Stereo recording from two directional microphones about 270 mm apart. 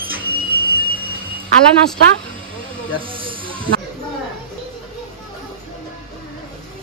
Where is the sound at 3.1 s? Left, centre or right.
Centre.